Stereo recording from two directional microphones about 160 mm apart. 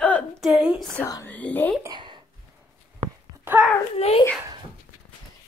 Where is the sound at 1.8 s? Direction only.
25° right (ahead or behind).